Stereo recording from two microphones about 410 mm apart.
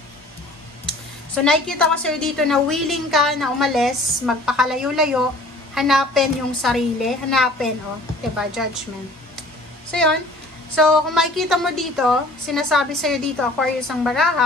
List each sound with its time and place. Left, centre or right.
1.3 s a woman's voice: centre
9.8 s a woman's voice: centre